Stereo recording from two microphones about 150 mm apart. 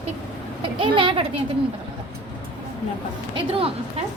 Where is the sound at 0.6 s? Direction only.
35° right (ahead or behind).